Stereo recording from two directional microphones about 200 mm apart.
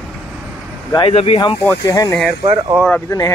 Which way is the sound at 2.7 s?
5° left (ahead or behind).